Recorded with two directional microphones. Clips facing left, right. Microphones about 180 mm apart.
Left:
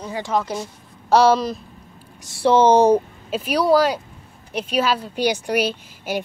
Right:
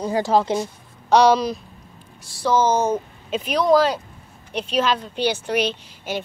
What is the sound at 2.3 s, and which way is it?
Speech, 30° left (ahead or behind).